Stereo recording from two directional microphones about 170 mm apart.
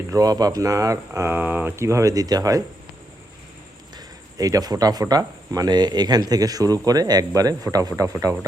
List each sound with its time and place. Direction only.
0.1 s speech: 20° right (ahead or behind)
3.9 s speech: 20° right (ahead or behind)